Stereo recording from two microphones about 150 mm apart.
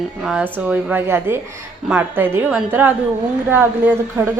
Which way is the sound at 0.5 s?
10° right (ahead or behind).